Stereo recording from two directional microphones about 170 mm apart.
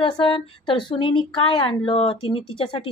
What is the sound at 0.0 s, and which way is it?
Speech, 30° left (ahead or behind).